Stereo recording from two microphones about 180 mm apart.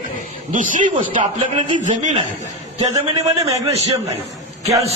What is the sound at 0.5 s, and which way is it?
A man's voice, 45° right (ahead or behind).